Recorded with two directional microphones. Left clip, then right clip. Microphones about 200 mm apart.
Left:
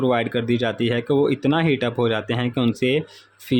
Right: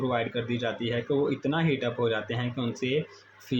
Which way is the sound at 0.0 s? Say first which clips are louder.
Left 8 dB; 50° left (ahead or behind).